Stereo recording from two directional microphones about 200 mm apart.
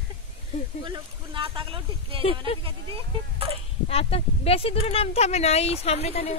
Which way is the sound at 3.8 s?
30° left (ahead or behind).